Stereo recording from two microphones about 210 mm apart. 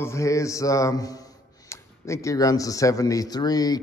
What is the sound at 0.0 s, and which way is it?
A man's voice, 15° left (ahead or behind).